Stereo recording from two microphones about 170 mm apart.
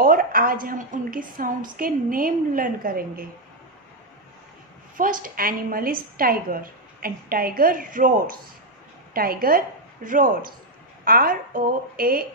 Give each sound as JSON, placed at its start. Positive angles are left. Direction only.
{"t": 0.0, "sound": "a woman's voice", "side_deg": -55}
{"t": 4.9, "sound": "a woman's voice", "side_deg": -55}